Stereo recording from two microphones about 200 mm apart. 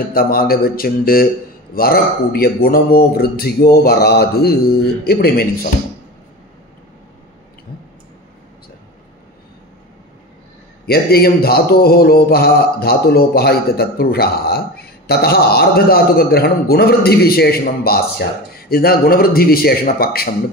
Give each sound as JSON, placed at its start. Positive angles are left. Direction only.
{"t": 0.1, "sound": "mantra", "side_deg": 45}
{"t": 10.9, "sound": "mantra", "side_deg": 50}